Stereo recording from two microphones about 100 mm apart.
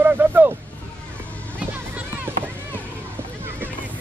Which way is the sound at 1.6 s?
15° right (ahead or behind).